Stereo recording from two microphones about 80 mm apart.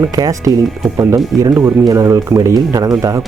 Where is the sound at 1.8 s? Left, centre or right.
Right.